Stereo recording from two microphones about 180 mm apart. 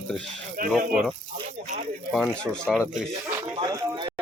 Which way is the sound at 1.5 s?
40° right (ahead or behind).